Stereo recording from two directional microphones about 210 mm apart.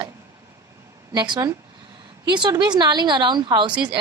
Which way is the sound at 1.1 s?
20° right (ahead or behind).